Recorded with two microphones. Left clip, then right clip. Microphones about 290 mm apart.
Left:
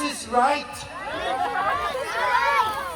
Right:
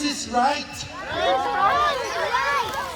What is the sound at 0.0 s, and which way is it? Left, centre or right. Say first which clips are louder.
Music: even; centre.